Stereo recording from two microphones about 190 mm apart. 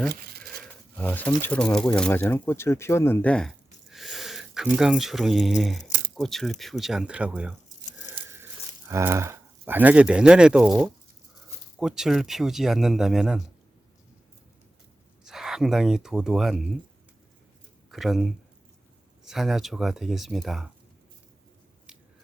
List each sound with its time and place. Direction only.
0.1 s a sound: 55° right (ahead or behind)
0.9 s speech: 10° left (ahead or behind)
8.1 s a sound: 10° right (ahead or behind)
8.9 s speech: 15° right (ahead or behind)
15.2 s speech: centre (ahead or behind)
17.9 s speech: centre (ahead or behind)